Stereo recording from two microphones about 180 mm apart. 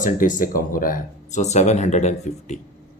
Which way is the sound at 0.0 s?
45° left (ahead or behind).